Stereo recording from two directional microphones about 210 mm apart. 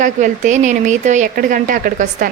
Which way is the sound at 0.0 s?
35° right (ahead or behind).